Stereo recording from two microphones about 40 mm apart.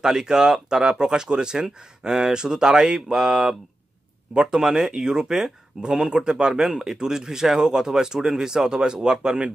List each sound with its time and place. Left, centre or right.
0.0 s speech: centre